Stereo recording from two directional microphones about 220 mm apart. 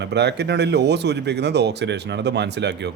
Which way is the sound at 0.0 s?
50° right (ahead or behind).